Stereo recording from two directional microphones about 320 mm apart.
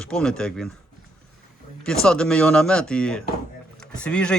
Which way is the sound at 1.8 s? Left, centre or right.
Centre.